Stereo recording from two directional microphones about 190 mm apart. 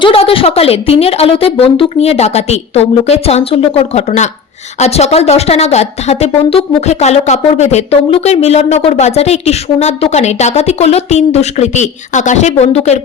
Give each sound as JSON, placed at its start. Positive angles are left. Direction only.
{"t": 0.0, "sound": "a woman's voice", "side_deg": 30}